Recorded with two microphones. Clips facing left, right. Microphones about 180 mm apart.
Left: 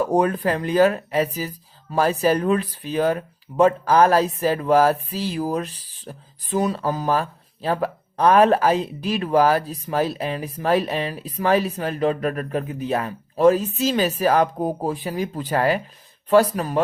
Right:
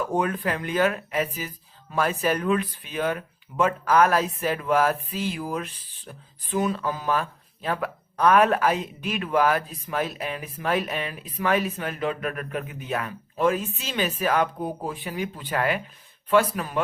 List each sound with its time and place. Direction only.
0.0 s speech: 35° left (ahead or behind)